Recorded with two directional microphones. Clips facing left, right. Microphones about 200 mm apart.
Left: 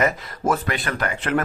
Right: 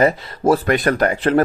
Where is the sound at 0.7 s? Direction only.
45° right (ahead or behind).